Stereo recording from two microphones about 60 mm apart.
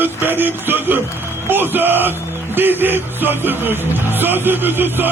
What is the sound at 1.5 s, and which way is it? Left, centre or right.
Speech, right.